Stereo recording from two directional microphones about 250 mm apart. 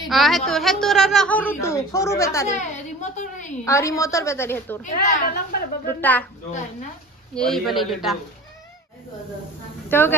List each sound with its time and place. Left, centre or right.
0.0 s speech: centre
2.5 s a sound: left
3.6 s speech: centre
4.8 s a woman's voice: left
5.9 s speech: centre
7.3 s a man's voice: centre
9.8 s speech: centre